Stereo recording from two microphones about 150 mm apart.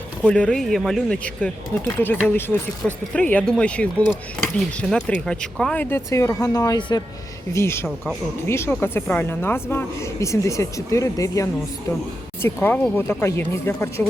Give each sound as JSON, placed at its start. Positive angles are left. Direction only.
{"t": 0.3, "sound": "a man's voice", "side_deg": 10}
{"t": 7.5, "sound": "a woman's voice", "side_deg": 15}